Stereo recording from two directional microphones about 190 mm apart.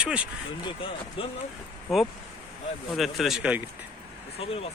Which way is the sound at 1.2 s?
30° left (ahead or behind).